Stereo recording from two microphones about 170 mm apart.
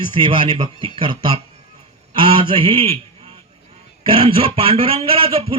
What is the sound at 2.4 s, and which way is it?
Speech, 30° right (ahead or behind).